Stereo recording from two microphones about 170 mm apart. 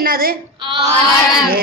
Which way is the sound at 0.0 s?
60° right (ahead or behind).